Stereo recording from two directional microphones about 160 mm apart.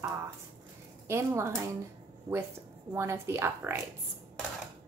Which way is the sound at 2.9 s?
15° right (ahead or behind).